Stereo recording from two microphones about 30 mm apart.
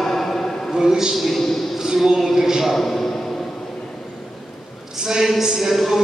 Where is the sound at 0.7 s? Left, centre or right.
Centre.